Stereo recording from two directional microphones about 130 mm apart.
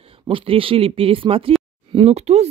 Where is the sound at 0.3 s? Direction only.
45° right (ahead or behind).